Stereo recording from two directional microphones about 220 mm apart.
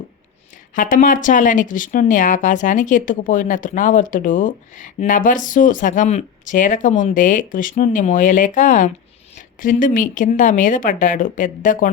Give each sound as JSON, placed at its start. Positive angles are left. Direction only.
{"t": 0.8, "sound": "speech", "side_deg": 35}